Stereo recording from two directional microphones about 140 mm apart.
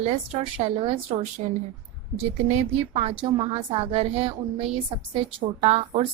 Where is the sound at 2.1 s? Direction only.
50° right (ahead or behind).